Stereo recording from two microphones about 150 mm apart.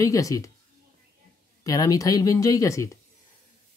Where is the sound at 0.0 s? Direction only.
20° left (ahead or behind).